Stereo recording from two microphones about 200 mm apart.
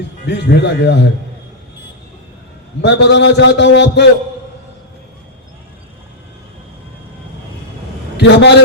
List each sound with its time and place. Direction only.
0.3 s a man's voice: 60° left (ahead or behind)
2.8 s a man's voice: 60° left (ahead or behind)
8.2 s a man's voice: 60° left (ahead or behind)